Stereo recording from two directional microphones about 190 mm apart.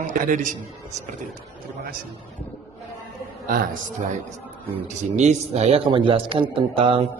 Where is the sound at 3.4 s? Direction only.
50° right (ahead or behind).